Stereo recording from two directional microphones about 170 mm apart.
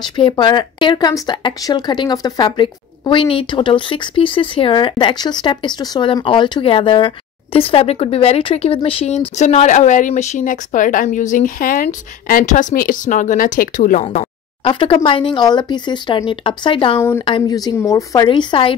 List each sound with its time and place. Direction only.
0.0 s speech: 25° left (ahead or behind); by 14.0 s 50° left (ahead or behind)
14.6 s speech: 30° left (ahead or behind)